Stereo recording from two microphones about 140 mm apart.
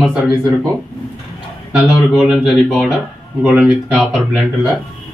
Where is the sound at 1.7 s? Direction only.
Centre (ahead or behind).